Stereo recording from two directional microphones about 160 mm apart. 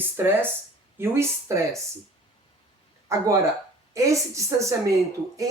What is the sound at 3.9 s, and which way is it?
A woman's voice, 20° right (ahead or behind).